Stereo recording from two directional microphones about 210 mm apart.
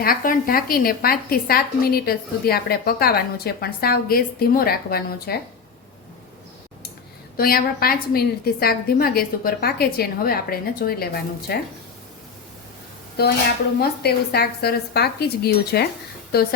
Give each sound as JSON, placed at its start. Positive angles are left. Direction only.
{"t": 0.0, "sound": "a woman's voice", "side_deg": 40}
{"t": 7.3, "sound": "a woman's voice", "side_deg": 45}
{"t": 13.2, "sound": "a woman's voice", "side_deg": 50}